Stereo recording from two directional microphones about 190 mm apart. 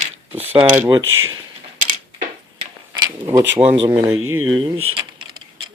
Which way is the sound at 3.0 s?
15° right (ahead or behind).